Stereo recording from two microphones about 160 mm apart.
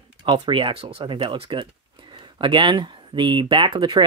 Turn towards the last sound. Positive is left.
turn(degrees=-30)  # may be behind; listen again after turning